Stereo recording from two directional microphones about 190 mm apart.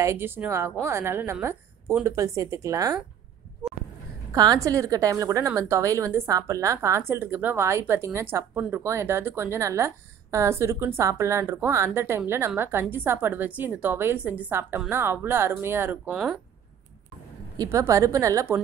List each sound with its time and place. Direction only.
0.0 s a woman's voice: 15° right (ahead or behind)
4.3 s a woman's voice: 20° right (ahead or behind)
17.6 s a woman's voice: 15° right (ahead or behind)